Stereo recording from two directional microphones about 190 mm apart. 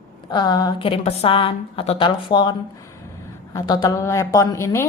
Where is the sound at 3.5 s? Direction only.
20° left (ahead or behind).